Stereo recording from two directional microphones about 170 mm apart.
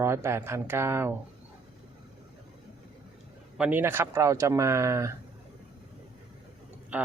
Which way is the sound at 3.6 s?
10° right (ahead or behind).